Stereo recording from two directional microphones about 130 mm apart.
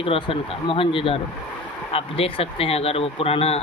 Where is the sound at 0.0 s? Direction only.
45° left (ahead or behind).